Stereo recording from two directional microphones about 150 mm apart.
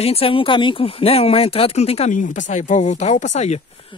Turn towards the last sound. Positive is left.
turn(degrees=50)  # may be behind; listen again after turning